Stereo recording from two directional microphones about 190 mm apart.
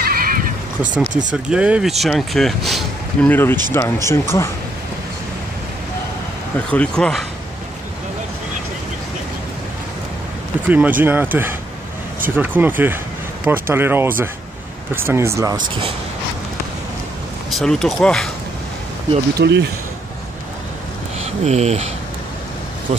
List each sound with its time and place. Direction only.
0.0 s neigh: 50° right (ahead or behind)
1.3 s speech: 5° right (ahead or behind); by 4.5 s 15° left (ahead or behind)
6.7 s speech: 5° left (ahead or behind)
10.7 s speech: 10° right (ahead or behind)
17.5 s speech: centre (ahead or behind)
19.3 s speech: 65° right (ahead or behind)
21.2 s speech: 35° right (ahead or behind)